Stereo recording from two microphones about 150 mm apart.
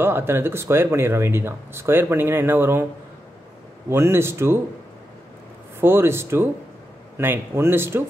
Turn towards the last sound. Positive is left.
turn(degrees=-15)  # may be behind; listen again after turning